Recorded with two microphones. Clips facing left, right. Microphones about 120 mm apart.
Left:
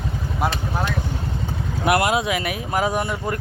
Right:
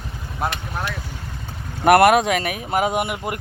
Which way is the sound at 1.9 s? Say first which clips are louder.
Right 6 dB; 60° right (ahead or behind).